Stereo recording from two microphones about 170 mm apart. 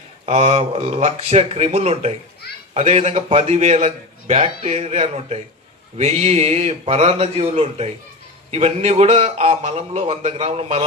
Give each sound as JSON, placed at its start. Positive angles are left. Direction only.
{"t": 0.3, "sound": "a man's voice", "side_deg": -40}